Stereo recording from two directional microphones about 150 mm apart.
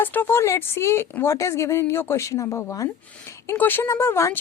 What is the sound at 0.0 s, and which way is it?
A woman's voice, 15° left (ahead or behind).